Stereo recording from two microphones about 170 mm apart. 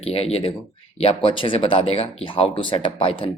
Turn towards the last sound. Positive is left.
turn(degrees=30)  # may be behind; listen again after turning